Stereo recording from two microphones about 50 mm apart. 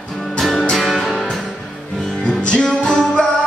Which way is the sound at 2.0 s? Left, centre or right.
Centre.